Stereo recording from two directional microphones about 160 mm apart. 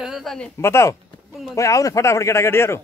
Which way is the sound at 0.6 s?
15° left (ahead or behind).